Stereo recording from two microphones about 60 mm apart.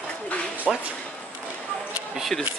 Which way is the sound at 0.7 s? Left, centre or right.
Centre.